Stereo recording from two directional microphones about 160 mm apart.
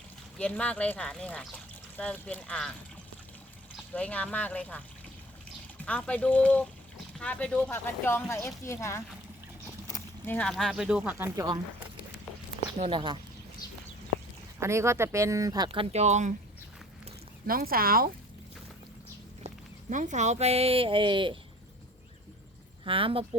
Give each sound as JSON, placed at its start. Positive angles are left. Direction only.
{"t": 0.3, "sound": "speech", "side_deg": 5}
{"t": 3.9, "sound": "speech", "side_deg": 10}
{"t": 5.8, "sound": "speech", "side_deg": 10}
{"t": 12.8, "sound": "speech", "side_deg": -30}
{"t": 14.6, "sound": "speech", "side_deg": -15}
{"t": 17.4, "sound": "speech", "side_deg": -65}
{"t": 19.9, "sound": "speech", "side_deg": -50}
{"t": 22.8, "sound": "speech", "side_deg": -35}